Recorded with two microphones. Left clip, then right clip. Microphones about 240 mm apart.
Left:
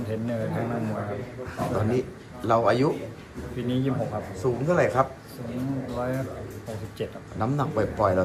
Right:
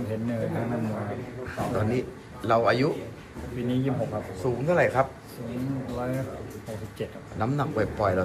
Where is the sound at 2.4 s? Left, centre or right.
Centre.